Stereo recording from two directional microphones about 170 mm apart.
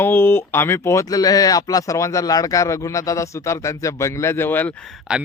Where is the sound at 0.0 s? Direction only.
15° left (ahead or behind).